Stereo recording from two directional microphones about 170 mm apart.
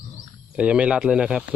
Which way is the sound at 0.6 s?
10° right (ahead or behind).